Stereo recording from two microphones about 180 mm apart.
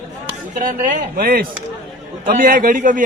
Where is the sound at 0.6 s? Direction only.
45° right (ahead or behind).